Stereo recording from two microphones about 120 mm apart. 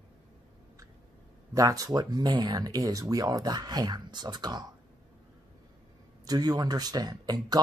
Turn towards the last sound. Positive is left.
turn(degrees=-35)  # may be behind; listen again after turning